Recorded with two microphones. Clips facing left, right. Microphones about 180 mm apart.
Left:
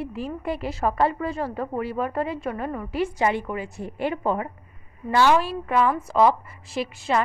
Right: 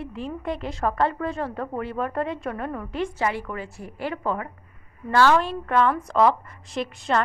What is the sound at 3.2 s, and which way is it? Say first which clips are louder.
A woman's voice: left 3 dB; 20° left (ahead or behind).